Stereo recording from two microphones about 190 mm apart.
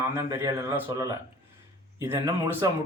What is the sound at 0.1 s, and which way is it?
Speech, 15° right (ahead or behind).